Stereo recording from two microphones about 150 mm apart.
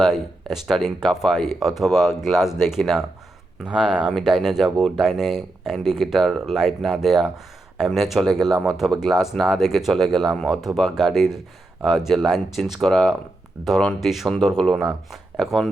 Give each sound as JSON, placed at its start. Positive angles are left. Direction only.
{"t": 0.0, "sound": "speech", "side_deg": -5}